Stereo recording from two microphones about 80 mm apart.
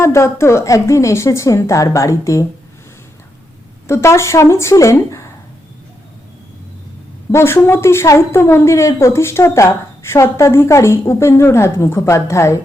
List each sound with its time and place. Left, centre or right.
0.0 s a woman's voice: left
3.8 s a woman's voice: left
7.3 s a woman's voice: left